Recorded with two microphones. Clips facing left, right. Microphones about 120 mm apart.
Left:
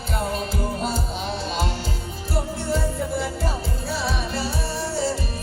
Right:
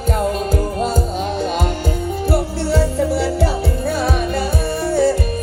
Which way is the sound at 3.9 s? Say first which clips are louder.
Right 6 dB; 55° right (ahead or behind).